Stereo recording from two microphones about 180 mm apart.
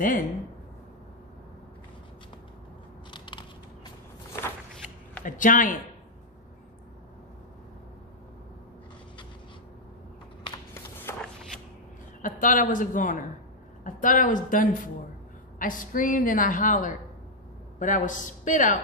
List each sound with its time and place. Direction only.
0.0 s a woman's voice: 50° left (ahead or behind)
3.1 s crushing: 25° left (ahead or behind)
5.2 s a woman's voice: 45° left (ahead or behind)
11.1 s a sound: 15° left (ahead or behind)
12.2 s a woman's voice: 45° left (ahead or behind)